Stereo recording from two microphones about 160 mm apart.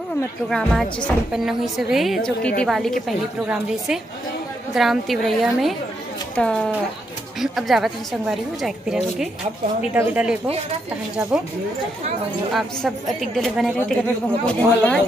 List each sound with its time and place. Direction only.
0.5 s a woman's voice: 5° left (ahead or behind)
11.3 s speech: 5° right (ahead or behind)
13.4 s a woman's voice: centre (ahead or behind)